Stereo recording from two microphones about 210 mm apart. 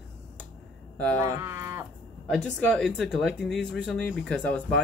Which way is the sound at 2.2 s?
5° left (ahead or behind).